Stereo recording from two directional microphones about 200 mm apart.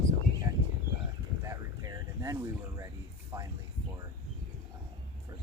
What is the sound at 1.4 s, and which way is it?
Speech, 15° right (ahead or behind).